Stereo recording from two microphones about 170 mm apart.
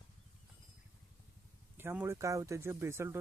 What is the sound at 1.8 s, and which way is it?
Speech, 15° right (ahead or behind).